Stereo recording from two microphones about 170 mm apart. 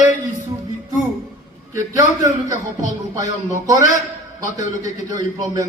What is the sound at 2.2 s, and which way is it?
A man's voice, 20° right (ahead or behind).